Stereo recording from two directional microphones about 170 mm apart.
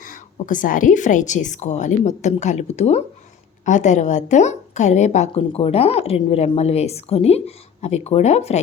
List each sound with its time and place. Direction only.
0.0 s a woman's voice: 50° left (ahead or behind)